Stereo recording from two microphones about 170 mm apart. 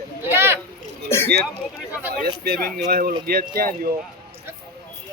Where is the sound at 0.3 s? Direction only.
15° right (ahead or behind).